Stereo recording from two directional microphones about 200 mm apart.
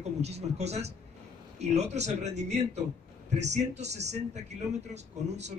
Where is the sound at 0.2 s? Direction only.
35° right (ahead or behind).